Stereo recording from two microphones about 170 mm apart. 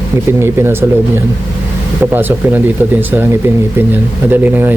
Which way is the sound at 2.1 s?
10° right (ahead or behind).